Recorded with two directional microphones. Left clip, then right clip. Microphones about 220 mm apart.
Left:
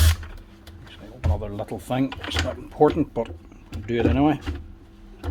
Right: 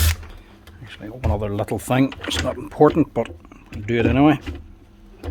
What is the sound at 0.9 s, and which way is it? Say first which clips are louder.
Speech: right 6 dB; 40° right (ahead or behind).